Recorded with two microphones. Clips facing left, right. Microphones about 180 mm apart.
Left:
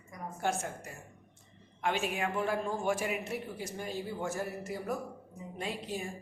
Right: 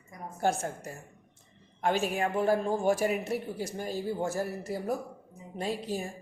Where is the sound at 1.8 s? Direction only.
40° right (ahead or behind).